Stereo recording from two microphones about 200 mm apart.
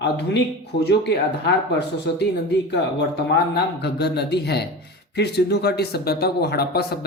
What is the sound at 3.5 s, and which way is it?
A man's voice, 55° left (ahead or behind).